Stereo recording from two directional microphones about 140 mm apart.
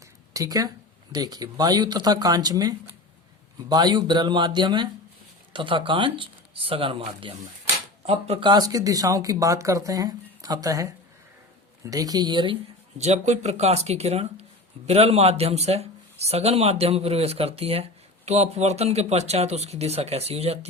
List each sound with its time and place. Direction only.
0.3 s speech: 25° right (ahead or behind)
13.0 s speech: 55° right (ahead or behind)